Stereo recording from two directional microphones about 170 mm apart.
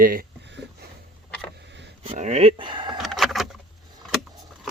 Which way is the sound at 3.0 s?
Centre (ahead or behind).